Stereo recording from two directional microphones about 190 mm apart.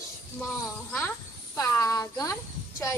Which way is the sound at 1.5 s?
20° left (ahead or behind).